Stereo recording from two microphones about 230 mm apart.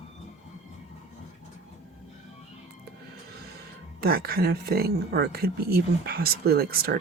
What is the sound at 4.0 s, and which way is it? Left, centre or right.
Speech, right.